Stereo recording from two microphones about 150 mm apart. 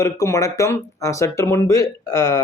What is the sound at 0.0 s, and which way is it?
Speech, 20° left (ahead or behind).